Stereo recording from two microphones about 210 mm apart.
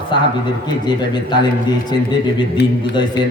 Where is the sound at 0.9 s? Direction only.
20° left (ahead or behind).